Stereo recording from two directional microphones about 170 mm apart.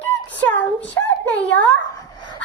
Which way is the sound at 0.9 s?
10° left (ahead or behind).